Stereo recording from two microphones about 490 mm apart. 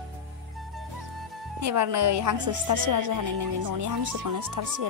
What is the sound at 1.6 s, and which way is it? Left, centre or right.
A woman's voice, right.